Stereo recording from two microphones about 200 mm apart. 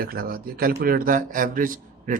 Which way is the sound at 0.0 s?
50° right (ahead or behind).